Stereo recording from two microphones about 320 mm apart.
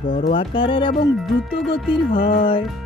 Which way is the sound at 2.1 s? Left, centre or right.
Left.